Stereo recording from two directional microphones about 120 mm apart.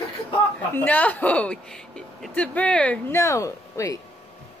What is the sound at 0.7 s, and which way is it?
Speech, 15° left (ahead or behind).